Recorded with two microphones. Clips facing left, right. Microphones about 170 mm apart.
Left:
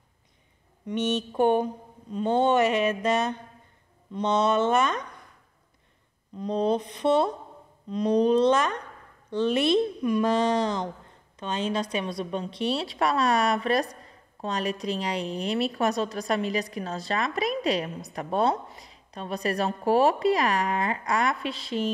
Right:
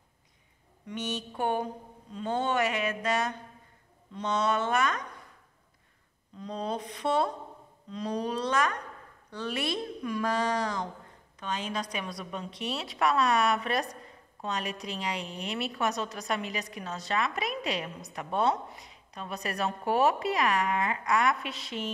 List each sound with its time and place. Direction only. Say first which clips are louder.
0.9 s a woman's voice: left 9 dB; 20° left (ahead or behind)
6.3 s a woman's voice: left 9 dB; 20° left (ahead or behind)